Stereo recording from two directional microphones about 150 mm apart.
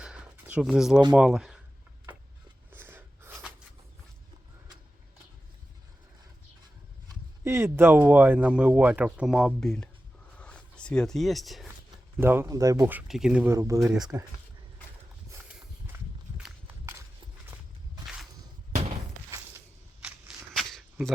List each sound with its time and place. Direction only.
0.0 s a sound: 5° right (ahead or behind)
0.7 s speech: centre (ahead or behind)
2.7 s snort: 15° right (ahead or behind)
7.4 s speech: 15° right (ahead or behind); by 9.9 s 5° left (ahead or behind)
10.3 s a sound: 5° left (ahead or behind)
12.1 s speech: 15° right (ahead or behind)
13.5 s speech: 20° right (ahead or behind)
20.0 s shuffling cards: 5° right (ahead or behind)